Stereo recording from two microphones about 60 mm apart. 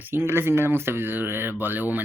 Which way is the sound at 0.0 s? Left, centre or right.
Right.